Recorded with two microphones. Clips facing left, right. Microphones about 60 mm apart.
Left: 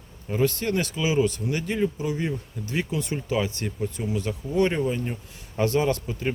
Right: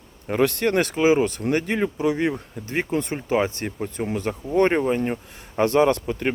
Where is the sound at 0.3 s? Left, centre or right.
Right.